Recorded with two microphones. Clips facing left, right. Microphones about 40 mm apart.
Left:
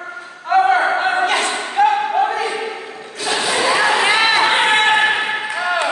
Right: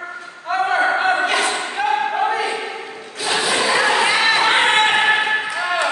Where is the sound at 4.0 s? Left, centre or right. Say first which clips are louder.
Left 2 dB; left.